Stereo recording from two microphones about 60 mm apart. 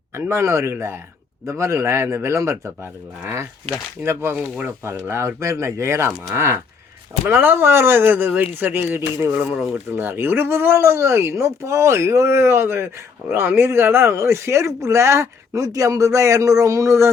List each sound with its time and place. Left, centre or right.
0.3 s speech: right
7.3 s speech: right
15.6 s speech: right